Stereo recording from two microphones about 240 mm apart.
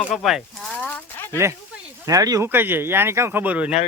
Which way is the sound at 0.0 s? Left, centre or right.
Centre.